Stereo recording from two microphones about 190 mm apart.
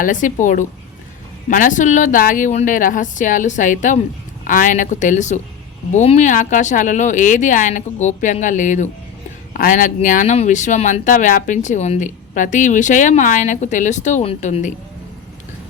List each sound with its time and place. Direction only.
0.0 s a woman's voice: 40° left (ahead or behind)